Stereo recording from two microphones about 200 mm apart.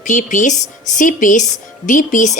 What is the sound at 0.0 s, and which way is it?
Speech, 40° left (ahead or behind).